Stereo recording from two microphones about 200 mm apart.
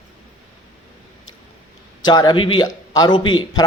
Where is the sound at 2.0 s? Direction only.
20° left (ahead or behind).